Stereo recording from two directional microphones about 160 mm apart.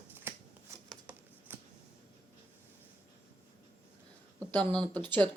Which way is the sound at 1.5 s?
10° right (ahead or behind).